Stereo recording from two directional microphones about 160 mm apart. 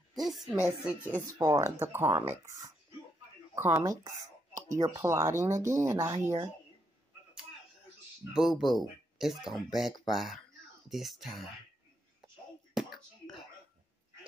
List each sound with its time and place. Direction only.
0.1 s speech: centre (ahead or behind)
1.2 s speech: 20° right (ahead or behind)
8.3 s speech: centre (ahead or behind)
12.8 s a sound: 5° right (ahead or behind)